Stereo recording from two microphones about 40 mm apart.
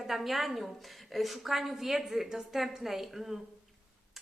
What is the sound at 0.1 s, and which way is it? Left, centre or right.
A woman's voice, centre.